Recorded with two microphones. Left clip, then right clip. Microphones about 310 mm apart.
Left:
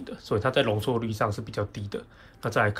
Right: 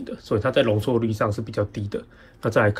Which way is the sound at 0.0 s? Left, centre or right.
Centre.